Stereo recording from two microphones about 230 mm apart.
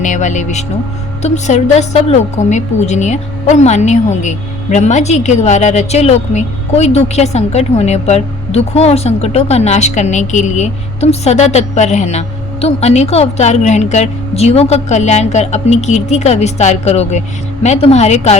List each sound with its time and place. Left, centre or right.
0.0 s a woman's voice: left